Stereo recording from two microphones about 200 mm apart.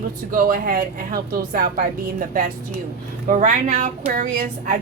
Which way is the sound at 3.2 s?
40° right (ahead or behind).